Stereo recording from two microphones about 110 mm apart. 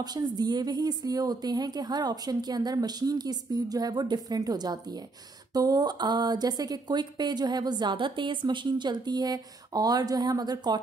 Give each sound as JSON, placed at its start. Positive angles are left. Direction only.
{"t": 0.0, "sound": "speech", "side_deg": -40}